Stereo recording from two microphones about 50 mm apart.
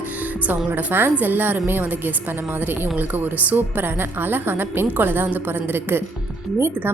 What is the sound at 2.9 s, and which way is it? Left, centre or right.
A woman's voice, right.